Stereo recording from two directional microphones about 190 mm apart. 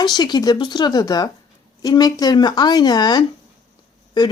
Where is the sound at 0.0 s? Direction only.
20° left (ahead or behind).